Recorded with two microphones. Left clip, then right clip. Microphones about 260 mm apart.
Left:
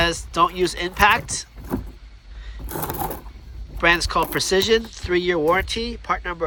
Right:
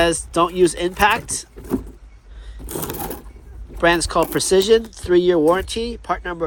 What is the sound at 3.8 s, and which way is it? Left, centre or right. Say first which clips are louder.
Speech: right 2 dB; centre.